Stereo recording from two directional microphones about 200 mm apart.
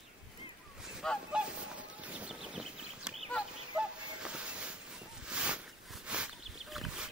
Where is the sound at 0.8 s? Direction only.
Centre (ahead or behind).